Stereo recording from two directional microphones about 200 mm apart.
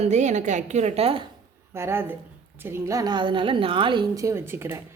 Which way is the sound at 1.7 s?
10° right (ahead or behind).